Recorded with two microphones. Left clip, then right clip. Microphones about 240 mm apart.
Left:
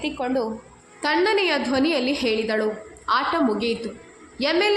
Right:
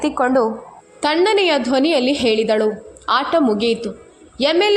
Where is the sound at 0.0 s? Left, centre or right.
Right.